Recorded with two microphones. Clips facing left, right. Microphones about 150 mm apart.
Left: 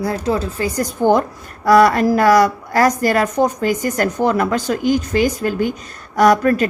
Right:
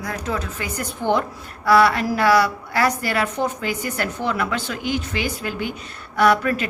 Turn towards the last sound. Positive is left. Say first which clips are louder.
# left 5 dB
turn(degrees=40)  # may be behind; listen again after turning